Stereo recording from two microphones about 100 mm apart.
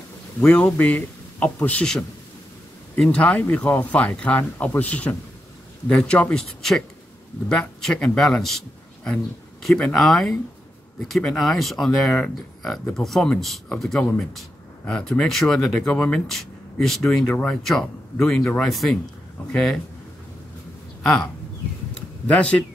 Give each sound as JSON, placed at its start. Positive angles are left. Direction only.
{"t": 0.5, "sound": "speech", "side_deg": 10}
{"t": 17.3, "sound": "speech", "side_deg": 15}
{"t": 17.6, "sound": "speech", "side_deg": 5}
{"t": 21.0, "sound": "speech", "side_deg": 10}
{"t": 21.9, "sound": "a sound", "side_deg": 10}